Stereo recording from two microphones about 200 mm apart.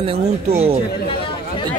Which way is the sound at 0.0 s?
30° right (ahead or behind).